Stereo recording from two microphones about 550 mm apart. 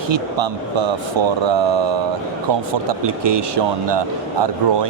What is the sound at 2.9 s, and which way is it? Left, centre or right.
Speech, right.